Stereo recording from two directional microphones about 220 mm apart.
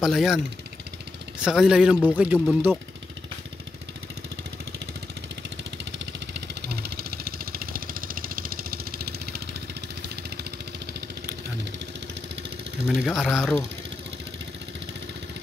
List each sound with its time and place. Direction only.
0.0 s a man's voice: centre (ahead or behind)
1.4 s a man's voice: 5° right (ahead or behind)
5.9 s vehicle: 50° right (ahead or behind)
12.8 s a man's voice: centre (ahead or behind)